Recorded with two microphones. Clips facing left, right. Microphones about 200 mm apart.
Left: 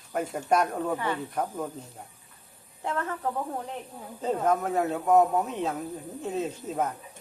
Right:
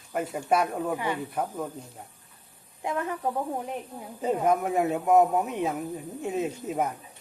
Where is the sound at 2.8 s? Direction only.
15° right (ahead or behind).